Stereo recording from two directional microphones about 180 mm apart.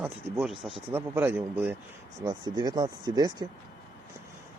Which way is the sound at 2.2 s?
25° right (ahead or behind).